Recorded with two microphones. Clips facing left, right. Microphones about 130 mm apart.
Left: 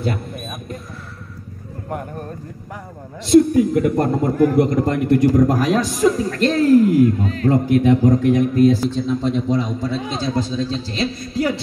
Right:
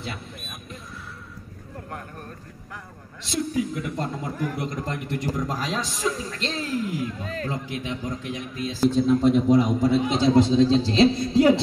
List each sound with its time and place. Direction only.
3.3 s speech: 55° left (ahead or behind)
8.8 s a man's voice: 5° right (ahead or behind); by 11.6 s 25° right (ahead or behind)